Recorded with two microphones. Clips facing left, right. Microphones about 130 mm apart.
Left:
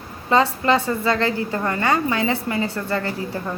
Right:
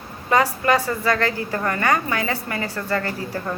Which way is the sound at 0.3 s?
25° left (ahead or behind).